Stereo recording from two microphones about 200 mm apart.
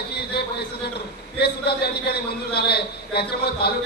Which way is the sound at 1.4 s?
50° left (ahead or behind).